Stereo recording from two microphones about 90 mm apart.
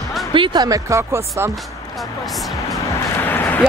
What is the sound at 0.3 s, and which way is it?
Speech, 70° right (ahead or behind).